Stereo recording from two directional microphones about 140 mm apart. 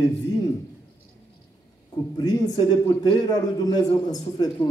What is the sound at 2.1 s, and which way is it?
A man's voice, 30° left (ahead or behind).